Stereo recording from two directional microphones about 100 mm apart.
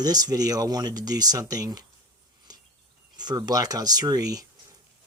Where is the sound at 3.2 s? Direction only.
45° right (ahead or behind).